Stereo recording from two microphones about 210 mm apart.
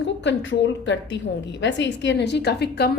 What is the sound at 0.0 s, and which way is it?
A woman's voice, 60° left (ahead or behind).